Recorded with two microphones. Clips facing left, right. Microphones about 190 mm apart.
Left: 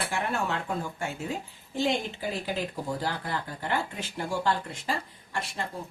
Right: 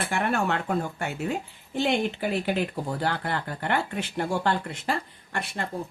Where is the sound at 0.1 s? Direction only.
60° right (ahead or behind).